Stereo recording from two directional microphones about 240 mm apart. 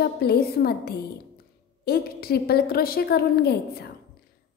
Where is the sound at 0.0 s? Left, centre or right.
Left.